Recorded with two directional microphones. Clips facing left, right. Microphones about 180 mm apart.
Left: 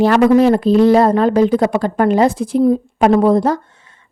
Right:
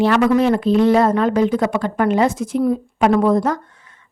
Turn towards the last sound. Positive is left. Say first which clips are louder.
# left 3 dB
turn(degrees=30)  # may be behind; listen again after turning